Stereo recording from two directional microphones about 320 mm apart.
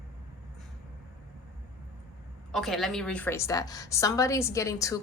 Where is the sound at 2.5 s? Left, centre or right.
Centre.